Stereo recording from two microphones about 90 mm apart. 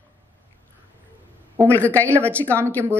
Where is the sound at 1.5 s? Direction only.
20° left (ahead or behind).